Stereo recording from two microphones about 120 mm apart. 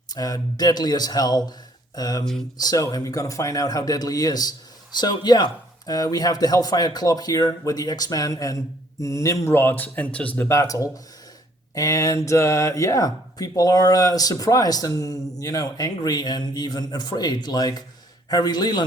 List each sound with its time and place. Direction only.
0.1 s speech: 30° left (ahead or behind); by 10.5 s 10° left (ahead or behind)
10.5 s speech: 25° left (ahead or behind)